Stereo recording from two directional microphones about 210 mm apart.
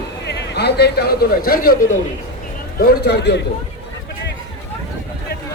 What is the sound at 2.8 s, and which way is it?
Speech, 50° left (ahead or behind).